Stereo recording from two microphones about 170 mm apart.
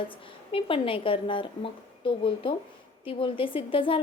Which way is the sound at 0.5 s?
30° left (ahead or behind).